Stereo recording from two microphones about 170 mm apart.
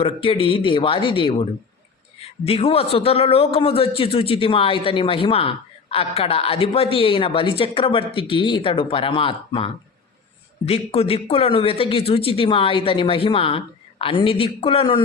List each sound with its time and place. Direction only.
0.0 s a man's voice: 35° left (ahead or behind)